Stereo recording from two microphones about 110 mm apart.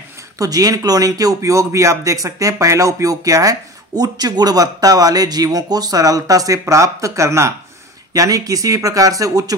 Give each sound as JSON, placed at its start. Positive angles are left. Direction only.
{"t": 0.4, "sound": "speech", "side_deg": -35}